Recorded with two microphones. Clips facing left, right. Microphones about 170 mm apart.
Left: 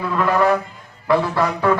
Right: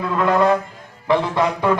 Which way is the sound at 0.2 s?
20° right (ahead or behind).